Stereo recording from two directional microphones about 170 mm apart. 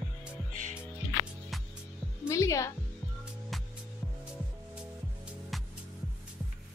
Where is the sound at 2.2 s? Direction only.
20° left (ahead or behind).